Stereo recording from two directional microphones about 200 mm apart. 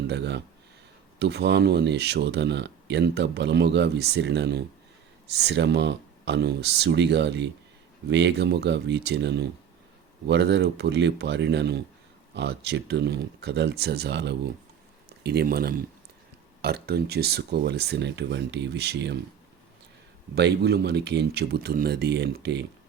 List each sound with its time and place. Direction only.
0.1 s speech: 60° right (ahead or behind)
20.3 s speech: 55° right (ahead or behind)